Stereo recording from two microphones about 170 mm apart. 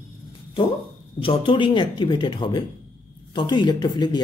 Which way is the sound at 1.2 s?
30° left (ahead or behind).